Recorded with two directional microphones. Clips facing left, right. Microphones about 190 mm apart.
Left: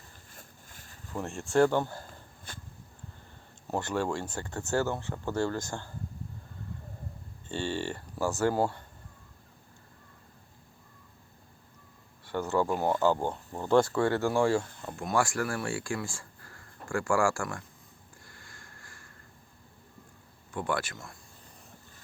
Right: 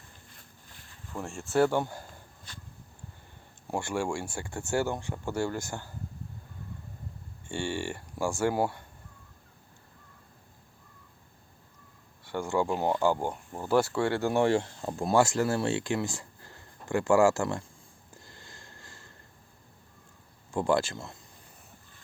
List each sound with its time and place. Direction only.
0.3 s vehicle: 45° left (ahead or behind)
1.1 s speech: centre (ahead or behind)
2.5 s a sound: 50° left (ahead or behind)
3.7 s speech: 10° right (ahead or behind)
7.4 s speech: 10° right (ahead or behind)
12.3 s speech: 15° right (ahead or behind)
14.0 s speech: 20° right (ahead or behind)
18.2 s sniff: 25° right (ahead or behind)
20.5 s speech: 25° right (ahead or behind)